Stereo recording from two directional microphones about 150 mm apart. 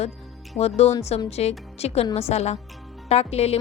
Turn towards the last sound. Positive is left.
turn(degrees=45)  # may be behind; listen again after turning